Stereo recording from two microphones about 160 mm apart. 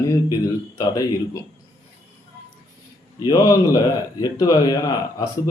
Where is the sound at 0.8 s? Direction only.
20° left (ahead or behind).